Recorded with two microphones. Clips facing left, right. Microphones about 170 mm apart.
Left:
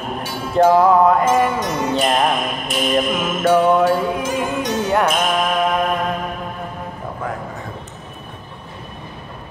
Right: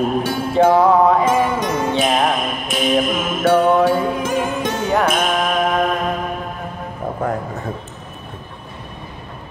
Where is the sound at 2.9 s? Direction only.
Centre (ahead or behind).